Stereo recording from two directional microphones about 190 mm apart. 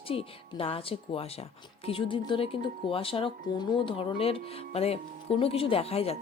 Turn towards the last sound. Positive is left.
turn(degrees=30)  # may be behind; listen again after turning